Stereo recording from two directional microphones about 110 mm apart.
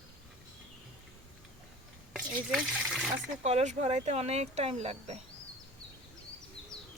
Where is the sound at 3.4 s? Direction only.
85° right.